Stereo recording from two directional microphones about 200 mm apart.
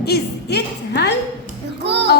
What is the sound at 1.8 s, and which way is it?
Music, 60° right (ahead or behind).